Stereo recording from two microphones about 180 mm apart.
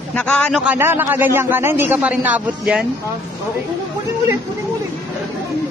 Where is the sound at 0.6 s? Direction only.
10° right (ahead or behind).